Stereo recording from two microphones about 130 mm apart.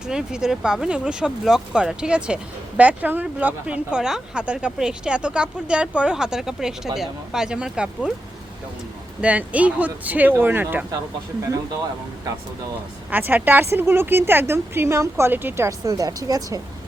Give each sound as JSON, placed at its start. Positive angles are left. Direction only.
{"t": 0.1, "sound": "speech", "side_deg": -5}
{"t": 9.2, "sound": "speech", "side_deg": -10}
{"t": 13.1, "sound": "speech", "side_deg": -15}